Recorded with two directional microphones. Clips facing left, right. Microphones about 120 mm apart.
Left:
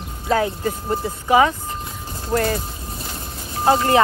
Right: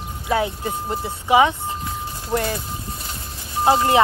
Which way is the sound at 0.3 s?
15° right (ahead or behind).